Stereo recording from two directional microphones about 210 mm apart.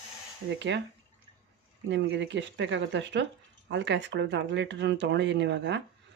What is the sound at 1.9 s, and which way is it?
Speech, 60° right (ahead or behind).